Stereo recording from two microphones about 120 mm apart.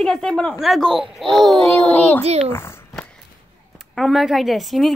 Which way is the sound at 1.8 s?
10° left (ahead or behind).